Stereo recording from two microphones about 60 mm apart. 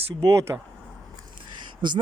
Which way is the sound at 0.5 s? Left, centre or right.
Centre.